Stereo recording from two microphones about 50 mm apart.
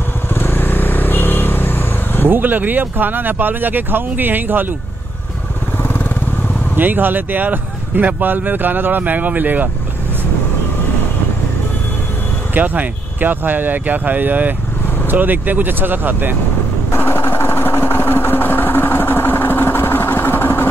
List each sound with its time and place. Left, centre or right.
0.3 s vehicle: left
2.2 s speech: right
6.8 s speech: right
12.5 s speech: right
16.9 s vehicle: left